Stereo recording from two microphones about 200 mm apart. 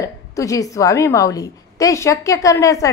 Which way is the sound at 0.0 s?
15° left (ahead or behind).